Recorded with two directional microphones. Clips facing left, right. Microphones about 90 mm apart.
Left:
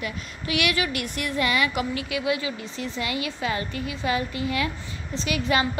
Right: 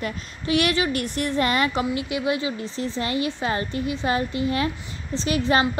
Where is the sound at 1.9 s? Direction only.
25° right (ahead or behind).